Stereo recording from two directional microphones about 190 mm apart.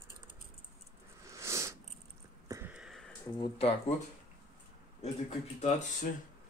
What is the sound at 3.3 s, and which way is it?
Speech, 25° left (ahead or behind).